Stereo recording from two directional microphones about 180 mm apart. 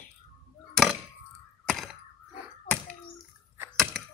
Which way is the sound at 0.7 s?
5° left (ahead or behind).